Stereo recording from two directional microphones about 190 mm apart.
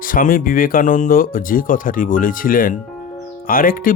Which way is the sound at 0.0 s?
45° left (ahead or behind).